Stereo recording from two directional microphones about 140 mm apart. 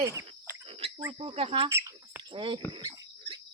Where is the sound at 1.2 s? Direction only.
45° right (ahead or behind).